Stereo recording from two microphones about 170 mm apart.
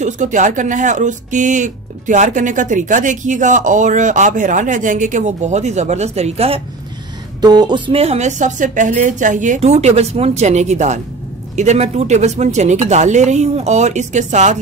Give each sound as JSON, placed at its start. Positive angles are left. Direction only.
{"t": 0.0, "sound": "speech", "side_deg": -45}
{"t": 7.4, "sound": "speech", "side_deg": -25}